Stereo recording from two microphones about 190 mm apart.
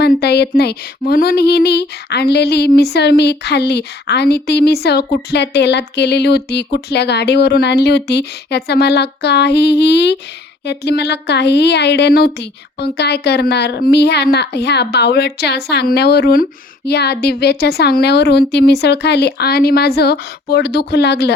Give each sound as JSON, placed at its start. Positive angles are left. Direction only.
{"t": 0.0, "sound": "speech", "side_deg": 60}